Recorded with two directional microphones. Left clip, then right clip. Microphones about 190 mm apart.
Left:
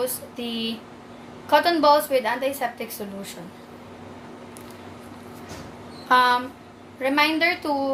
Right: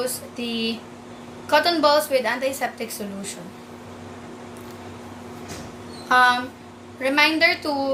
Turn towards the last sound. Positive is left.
turn(degrees=20)  # may be behind; listen again after turning